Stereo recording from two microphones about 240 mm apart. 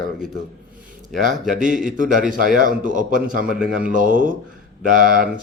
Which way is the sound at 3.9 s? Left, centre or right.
Right.